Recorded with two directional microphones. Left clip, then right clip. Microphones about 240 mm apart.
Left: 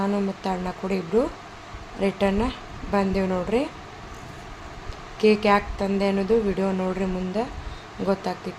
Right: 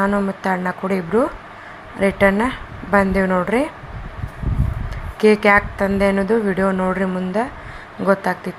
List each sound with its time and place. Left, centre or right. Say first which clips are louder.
0.0 s speech: right 7 dB; centre
2.0 s speech: right 8 dB; centre
5.2 s speech: right 6 dB; centre